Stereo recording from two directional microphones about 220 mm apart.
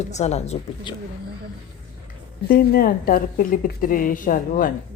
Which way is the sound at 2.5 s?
40° left (ahead or behind).